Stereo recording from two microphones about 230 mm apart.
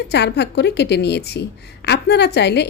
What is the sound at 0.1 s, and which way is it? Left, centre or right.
A woman's voice, left.